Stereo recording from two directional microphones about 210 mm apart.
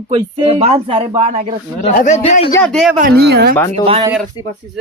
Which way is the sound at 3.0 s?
50° right (ahead or behind).